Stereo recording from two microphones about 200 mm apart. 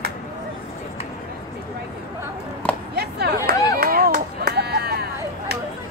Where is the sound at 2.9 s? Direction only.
55° right (ahead or behind).